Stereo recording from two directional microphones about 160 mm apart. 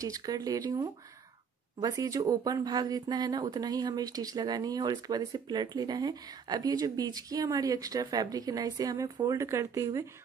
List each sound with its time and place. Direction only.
0.0 s speech: 20° right (ahead or behind)